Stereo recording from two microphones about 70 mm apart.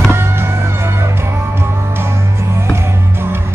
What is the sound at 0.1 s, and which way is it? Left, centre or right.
Music, right.